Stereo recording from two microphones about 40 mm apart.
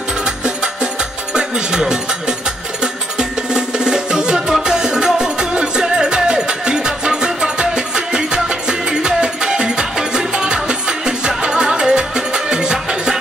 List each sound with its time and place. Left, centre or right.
1.3 s music: centre